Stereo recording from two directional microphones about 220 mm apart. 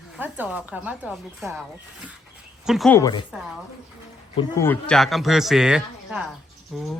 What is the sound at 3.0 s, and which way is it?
Speech, 20° left (ahead or behind).